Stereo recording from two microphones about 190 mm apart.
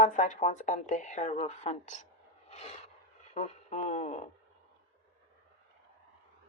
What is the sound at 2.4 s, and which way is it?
Vehicle, 35° left (ahead or behind).